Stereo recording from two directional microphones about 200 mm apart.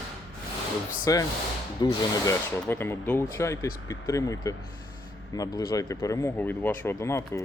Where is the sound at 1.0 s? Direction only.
15° left (ahead or behind).